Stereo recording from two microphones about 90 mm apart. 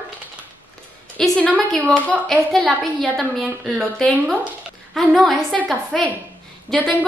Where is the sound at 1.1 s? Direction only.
10° left (ahead or behind).